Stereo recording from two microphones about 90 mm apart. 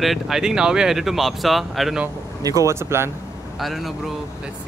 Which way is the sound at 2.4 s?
35° right (ahead or behind).